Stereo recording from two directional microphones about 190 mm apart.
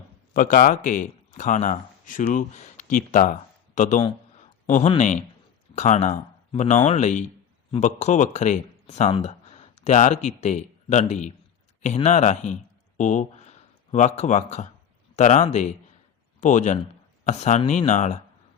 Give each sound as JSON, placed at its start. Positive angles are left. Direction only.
{"t": 0.3, "sound": "speech", "side_deg": 45}